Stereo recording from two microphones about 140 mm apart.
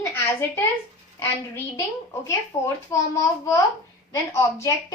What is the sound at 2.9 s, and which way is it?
Speech, 20° left (ahead or behind).